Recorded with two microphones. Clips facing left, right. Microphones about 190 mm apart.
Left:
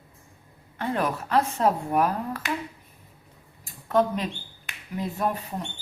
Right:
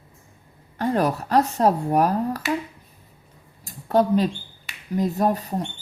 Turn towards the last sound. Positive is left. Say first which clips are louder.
# right 6 dB
turn(degrees=-35)  # may be behind; listen again after turning